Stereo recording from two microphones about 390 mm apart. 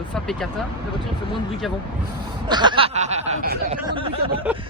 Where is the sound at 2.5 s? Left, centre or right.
Centre.